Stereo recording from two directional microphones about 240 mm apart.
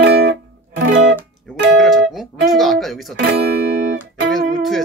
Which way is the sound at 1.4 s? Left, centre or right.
Centre.